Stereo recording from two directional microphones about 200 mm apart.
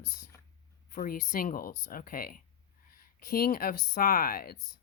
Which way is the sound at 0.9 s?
45° left (ahead or behind).